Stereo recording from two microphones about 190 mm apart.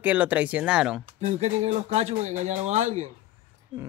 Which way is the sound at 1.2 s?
35° right (ahead or behind).